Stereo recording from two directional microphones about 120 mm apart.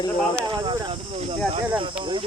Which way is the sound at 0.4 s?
40° right (ahead or behind).